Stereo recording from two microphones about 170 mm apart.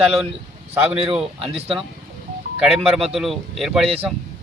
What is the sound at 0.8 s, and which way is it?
Speech, 35° right (ahead or behind).